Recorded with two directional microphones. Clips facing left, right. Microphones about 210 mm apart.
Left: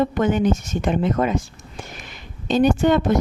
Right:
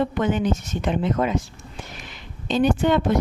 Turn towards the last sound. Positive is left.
turn(degrees=45)  # may be behind; listen again after turning